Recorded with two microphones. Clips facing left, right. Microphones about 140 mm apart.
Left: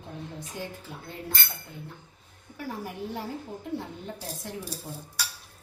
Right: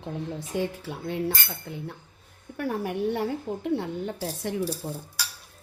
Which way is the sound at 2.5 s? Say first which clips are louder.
Right 7 dB; 65° right (ahead or behind).